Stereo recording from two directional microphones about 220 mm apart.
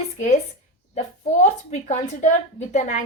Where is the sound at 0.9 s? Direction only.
35° left (ahead or behind).